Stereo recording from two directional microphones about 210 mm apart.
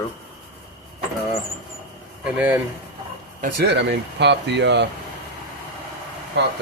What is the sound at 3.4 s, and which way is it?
Speech, 50° right (ahead or behind).